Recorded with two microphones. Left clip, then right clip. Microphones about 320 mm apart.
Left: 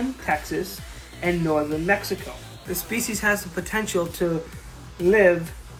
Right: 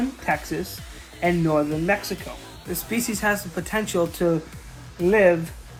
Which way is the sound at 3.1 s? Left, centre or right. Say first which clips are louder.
Left 2 dB; centre.